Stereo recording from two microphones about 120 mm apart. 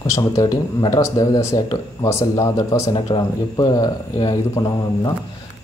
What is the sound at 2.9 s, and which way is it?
Speech, 40° left (ahead or behind).